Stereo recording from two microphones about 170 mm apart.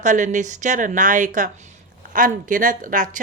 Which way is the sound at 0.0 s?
50° right (ahead or behind).